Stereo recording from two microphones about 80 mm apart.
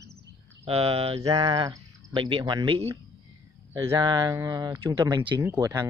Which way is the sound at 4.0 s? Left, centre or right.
Right.